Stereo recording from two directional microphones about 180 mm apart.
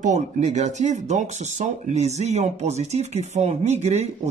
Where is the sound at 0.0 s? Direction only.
40° right (ahead or behind).